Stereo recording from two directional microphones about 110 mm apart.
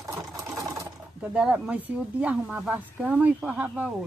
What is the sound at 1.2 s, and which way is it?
Speech, 10° right (ahead or behind).